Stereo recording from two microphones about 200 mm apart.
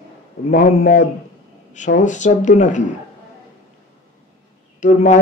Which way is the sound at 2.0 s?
35° left (ahead or behind).